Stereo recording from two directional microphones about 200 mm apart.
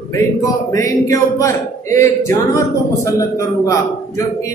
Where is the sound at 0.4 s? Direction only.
15° left (ahead or behind).